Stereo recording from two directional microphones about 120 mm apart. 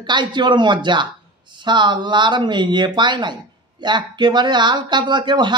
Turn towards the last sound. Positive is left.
turn(degrees=-40)  # may be behind; listen again after turning